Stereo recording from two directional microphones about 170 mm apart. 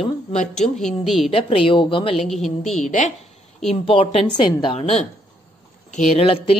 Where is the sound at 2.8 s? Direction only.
45° left (ahead or behind).